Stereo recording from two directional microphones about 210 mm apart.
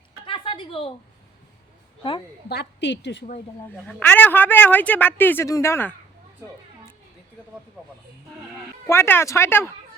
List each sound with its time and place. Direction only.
0.3 s a sound: 25° left (ahead or behind)
2.5 s a woman's voice: 55° left (ahead or behind)
3.8 s speech: 10° left (ahead or behind)
8.9 s speech: 10° left (ahead or behind)